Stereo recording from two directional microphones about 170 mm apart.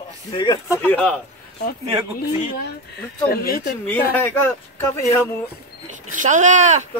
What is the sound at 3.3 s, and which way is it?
Speech, 65° left (ahead or behind).